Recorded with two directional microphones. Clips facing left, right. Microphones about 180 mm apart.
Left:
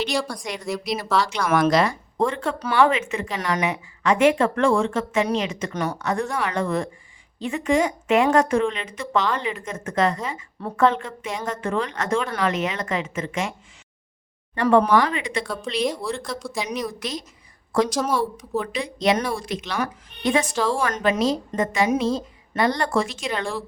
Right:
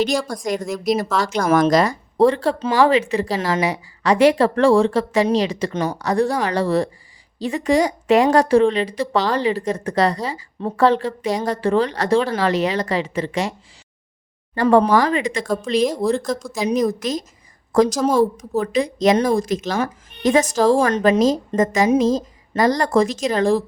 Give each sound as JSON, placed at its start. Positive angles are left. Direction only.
{"t": 0.0, "sound": "a woman's voice", "side_deg": -45}
{"t": 14.5, "sound": "a woman's voice", "side_deg": -35}